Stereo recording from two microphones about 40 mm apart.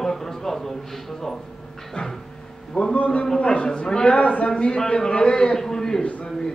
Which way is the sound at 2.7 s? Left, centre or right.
Left.